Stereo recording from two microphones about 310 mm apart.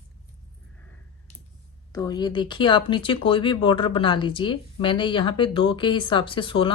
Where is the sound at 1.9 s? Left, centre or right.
Centre.